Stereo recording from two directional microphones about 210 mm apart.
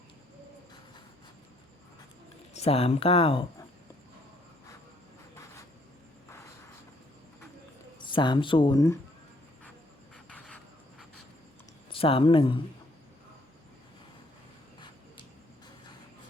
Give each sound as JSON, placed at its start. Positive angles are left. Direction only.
{"t": 2.5, "sound": "speech", "side_deg": 30}
{"t": 7.9, "sound": "speech", "side_deg": 20}
{"t": 10.2, "sound": "cricket", "side_deg": 5}
{"t": 11.9, "sound": "speech", "side_deg": 25}